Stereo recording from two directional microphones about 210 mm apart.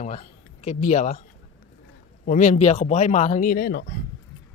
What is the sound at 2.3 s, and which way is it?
Speech, 35° left (ahead or behind).